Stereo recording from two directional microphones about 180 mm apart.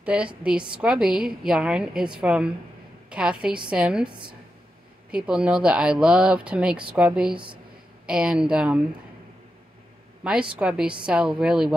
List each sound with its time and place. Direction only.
0.0 s a woman's voice: 5° right (ahead or behind)
4.1 s a woman's voice: 25° right (ahead or behind)
5.1 s a woman's voice: 5° right (ahead or behind)
10.2 s a woman's voice: 5° right (ahead or behind)